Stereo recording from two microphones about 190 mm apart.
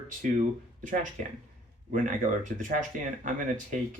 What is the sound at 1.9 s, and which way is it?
Speech, 45° right (ahead or behind).